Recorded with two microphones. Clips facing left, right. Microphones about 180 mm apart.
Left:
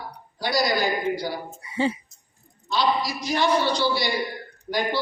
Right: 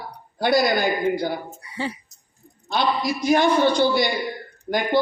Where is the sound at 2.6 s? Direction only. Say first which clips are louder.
Right 1 dB; 50° right (ahead or behind).